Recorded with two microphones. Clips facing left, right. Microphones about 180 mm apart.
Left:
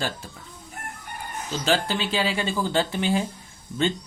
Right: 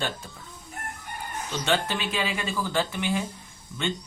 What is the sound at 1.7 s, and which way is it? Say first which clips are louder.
Speech: left 3 dB; 30° left (ahead or behind).